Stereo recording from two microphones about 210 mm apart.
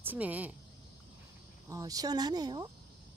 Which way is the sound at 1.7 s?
15° right (ahead or behind).